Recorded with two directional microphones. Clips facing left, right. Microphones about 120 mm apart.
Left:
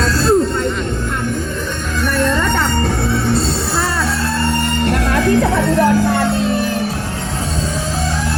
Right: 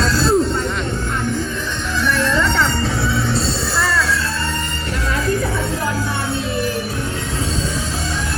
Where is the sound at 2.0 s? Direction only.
50° left (ahead or behind); by 5.9 s 70° left (ahead or behind).